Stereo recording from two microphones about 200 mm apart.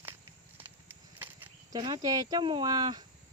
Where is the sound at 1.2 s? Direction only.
10° right (ahead or behind).